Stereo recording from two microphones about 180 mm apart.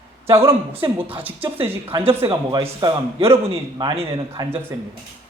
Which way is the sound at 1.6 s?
30° right (ahead or behind).